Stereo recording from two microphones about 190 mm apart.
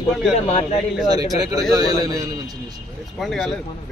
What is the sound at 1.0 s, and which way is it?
A man's voice, 20° right (ahead or behind).